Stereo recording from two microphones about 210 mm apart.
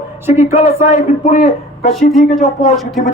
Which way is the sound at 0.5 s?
35° left (ahead or behind).